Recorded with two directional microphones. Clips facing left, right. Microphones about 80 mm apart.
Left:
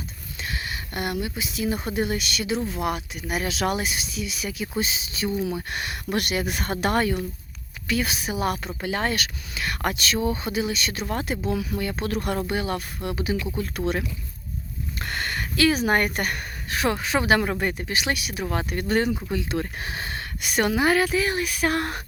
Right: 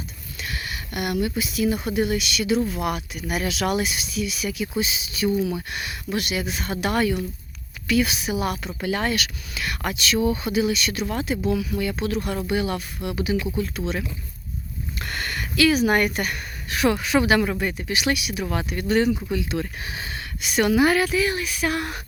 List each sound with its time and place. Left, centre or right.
0.3 s speech: left
5.8 s speech: left
13.6 s speech: left
14.9 s speech: left
20.7 s speech: left